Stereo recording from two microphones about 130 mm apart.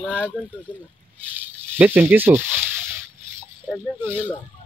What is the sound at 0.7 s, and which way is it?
Speech, 15° right (ahead or behind).